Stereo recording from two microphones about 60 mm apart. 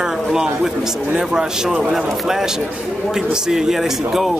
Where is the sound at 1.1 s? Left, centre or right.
Centre.